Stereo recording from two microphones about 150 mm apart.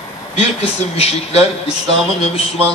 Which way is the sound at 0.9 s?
40° left (ahead or behind).